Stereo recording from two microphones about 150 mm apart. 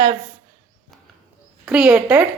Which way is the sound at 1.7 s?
10° right (ahead or behind).